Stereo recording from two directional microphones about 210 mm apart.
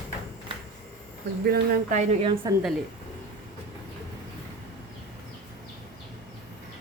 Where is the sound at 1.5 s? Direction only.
45° right (ahead or behind).